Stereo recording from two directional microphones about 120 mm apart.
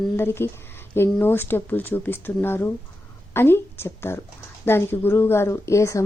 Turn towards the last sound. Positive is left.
turn(degrees=25)  # may be behind; listen again after turning